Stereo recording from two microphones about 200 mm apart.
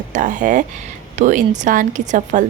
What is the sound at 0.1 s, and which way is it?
A woman's voice, 40° right (ahead or behind).